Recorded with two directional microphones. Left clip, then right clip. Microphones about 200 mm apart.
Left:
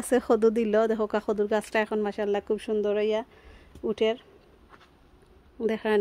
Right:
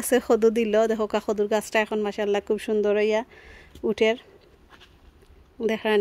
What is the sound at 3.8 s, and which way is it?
Speech, 20° right (ahead or behind).